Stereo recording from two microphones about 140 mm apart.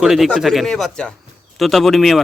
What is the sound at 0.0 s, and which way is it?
Speech, centre (ahead or behind).